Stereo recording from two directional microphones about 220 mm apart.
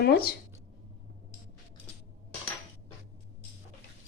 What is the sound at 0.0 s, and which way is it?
Speech, 45° left (ahead or behind).